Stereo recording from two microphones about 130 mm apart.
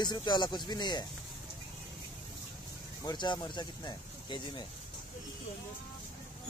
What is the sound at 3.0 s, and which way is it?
Speech, 35° left (ahead or behind).